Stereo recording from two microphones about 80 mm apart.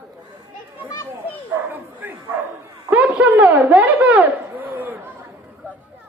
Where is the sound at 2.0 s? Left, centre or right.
Right.